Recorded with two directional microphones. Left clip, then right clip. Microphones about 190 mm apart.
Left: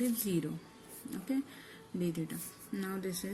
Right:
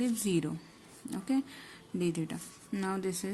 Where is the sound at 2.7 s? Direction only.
50° right (ahead or behind).